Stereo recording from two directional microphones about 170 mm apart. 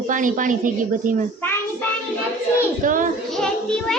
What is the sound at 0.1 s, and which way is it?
A woman's voice, 50° right (ahead or behind).